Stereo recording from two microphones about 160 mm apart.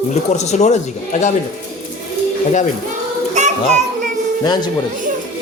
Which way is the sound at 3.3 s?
50° right (ahead or behind).